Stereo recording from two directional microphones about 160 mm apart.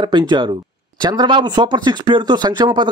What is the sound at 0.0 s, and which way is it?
Speech, 25° right (ahead or behind).